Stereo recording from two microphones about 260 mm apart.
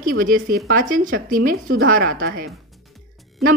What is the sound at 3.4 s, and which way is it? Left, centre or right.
Speech, centre.